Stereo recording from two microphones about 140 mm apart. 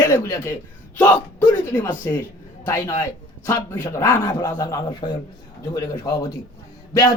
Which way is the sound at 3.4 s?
20° left (ahead or behind).